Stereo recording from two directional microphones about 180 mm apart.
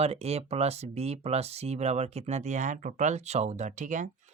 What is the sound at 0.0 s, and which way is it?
Speech, 35° right (ahead or behind).